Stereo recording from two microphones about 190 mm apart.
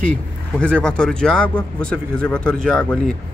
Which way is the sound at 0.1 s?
5° left (ahead or behind).